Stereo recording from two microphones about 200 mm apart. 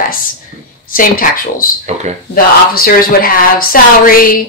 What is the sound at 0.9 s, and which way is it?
Speech, 45° left (ahead or behind).